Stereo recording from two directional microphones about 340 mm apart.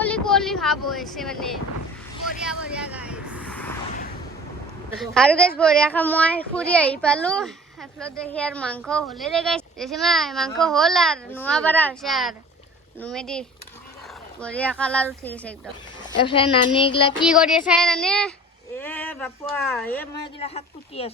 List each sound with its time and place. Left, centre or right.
0.0 s a sound: centre
4.9 s a child's voice: centre
14.4 s a child's voice: centre
16.3 s child singing: centre
17.2 s a child's voice: centre
20.4 s child singing: centre